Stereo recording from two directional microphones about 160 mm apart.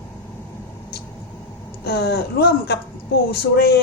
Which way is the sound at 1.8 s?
85° left.